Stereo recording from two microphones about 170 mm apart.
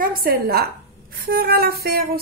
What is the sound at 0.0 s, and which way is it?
Speech, 60° right (ahead or behind).